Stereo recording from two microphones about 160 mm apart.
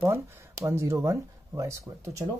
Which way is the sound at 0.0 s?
15° right (ahead or behind).